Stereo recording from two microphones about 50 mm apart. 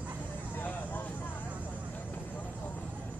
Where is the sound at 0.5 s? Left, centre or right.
Left.